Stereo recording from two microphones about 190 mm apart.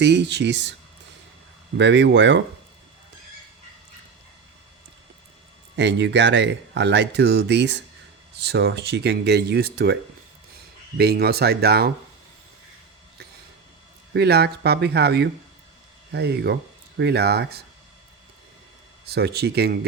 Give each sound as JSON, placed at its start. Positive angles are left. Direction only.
{"t": 0.0, "sound": "speech", "side_deg": -65}
{"t": 1.8, "sound": "speech", "side_deg": -65}
{"t": 5.7, "sound": "speech", "side_deg": -65}
{"t": 14.1, "sound": "speech", "side_deg": -60}
{"t": 19.0, "sound": "speech", "side_deg": -60}